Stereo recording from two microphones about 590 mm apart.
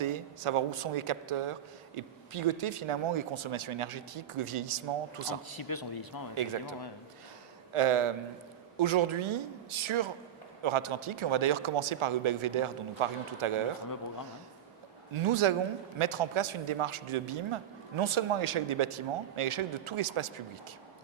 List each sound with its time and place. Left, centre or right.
0.0 s a man's voice: right
5.5 s a man's voice: left
6.3 s a man's voice: right
15.1 s a man's voice: right